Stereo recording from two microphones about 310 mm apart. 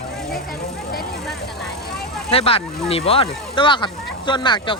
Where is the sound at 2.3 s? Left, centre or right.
Centre.